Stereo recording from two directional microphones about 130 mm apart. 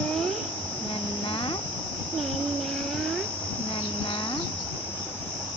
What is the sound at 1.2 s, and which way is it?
Cricket, 40° left (ahead or behind).